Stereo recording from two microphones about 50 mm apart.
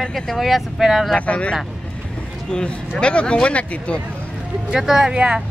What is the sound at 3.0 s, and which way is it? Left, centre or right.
Speech, left.